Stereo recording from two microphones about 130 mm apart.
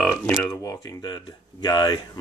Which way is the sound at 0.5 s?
25° left (ahead or behind).